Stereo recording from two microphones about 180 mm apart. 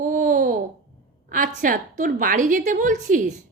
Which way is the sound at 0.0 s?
45° right (ahead or behind).